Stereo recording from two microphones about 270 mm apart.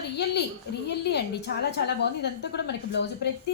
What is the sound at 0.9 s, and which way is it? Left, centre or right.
A woman's voice, left.